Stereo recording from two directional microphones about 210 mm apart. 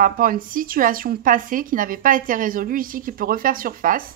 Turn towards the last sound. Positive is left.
turn(degrees=-40)  # may be behind; listen again after turning